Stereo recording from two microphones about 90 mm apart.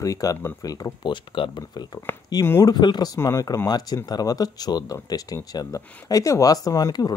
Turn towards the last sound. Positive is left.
turn(degrees=45)  # may be behind; listen again after turning